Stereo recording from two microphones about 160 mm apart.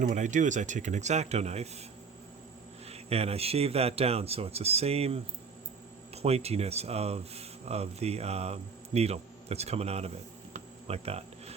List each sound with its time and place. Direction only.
0.0 s speech: 50° right (ahead or behind)
2.9 s speech: 40° right (ahead or behind)
6.2 s speech: 40° right (ahead or behind)
10.5 s insect: 40° right (ahead or behind)